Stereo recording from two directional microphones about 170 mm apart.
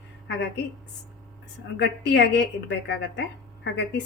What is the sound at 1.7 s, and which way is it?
A woman's voice, 85° left.